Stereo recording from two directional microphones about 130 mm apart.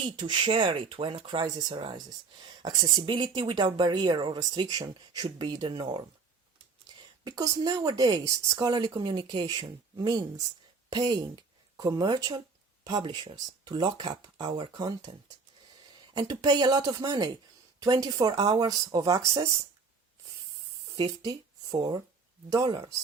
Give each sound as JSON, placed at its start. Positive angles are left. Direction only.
{"t": 0.0, "sound": "speech", "side_deg": -35}
{"t": 7.5, "sound": "speech", "side_deg": -30}
{"t": 16.1, "sound": "speech", "side_deg": -35}
{"t": 20.9, "sound": "speech", "side_deg": -35}